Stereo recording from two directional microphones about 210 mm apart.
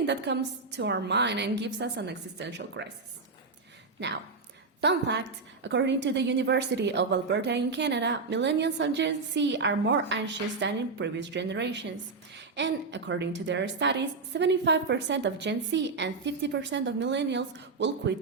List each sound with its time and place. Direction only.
0.0 s a woman's voice: 55° right (ahead or behind)
4.8 s a woman's voice: 55° right (ahead or behind)